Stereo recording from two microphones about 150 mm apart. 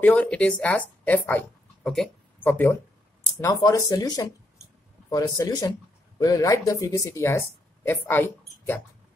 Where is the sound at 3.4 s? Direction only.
25° left (ahead or behind).